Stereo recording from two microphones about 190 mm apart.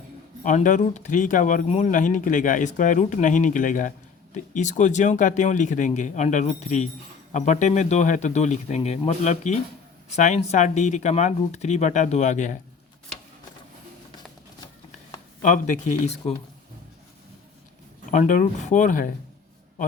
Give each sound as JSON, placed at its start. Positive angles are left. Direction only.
{"t": 0.4, "sound": "speech", "side_deg": 40}
{"t": 16.2, "sound": "speech", "side_deg": 35}
{"t": 18.1, "sound": "speech", "side_deg": 45}